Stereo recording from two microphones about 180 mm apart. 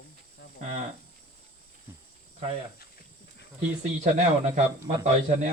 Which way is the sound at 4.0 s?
40° right (ahead or behind).